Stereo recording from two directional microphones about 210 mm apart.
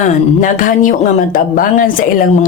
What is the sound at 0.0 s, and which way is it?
Speech, 40° left (ahead or behind).